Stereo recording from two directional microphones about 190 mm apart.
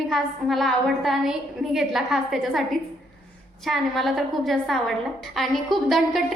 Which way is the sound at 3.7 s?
Centre (ahead or behind).